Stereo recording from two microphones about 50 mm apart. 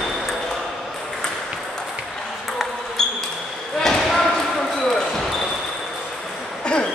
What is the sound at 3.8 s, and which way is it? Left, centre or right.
Basketball bounce, centre.